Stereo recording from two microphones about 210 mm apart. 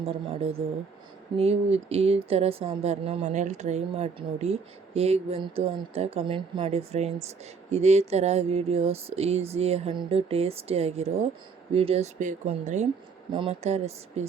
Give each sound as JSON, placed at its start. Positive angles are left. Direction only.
{"t": 0.0, "sound": "speech", "side_deg": -25}